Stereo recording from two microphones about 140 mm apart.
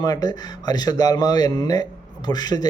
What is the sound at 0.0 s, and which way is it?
Speech, 30° left (ahead or behind).